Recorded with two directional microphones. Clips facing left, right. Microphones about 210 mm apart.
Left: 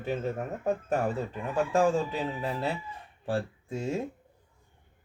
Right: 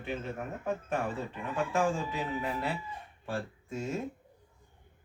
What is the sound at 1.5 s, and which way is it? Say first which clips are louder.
Speech: left 5 dB; 35° left (ahead or behind).